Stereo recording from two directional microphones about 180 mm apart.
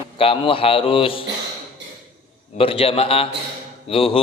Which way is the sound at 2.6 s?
30° left (ahead or behind).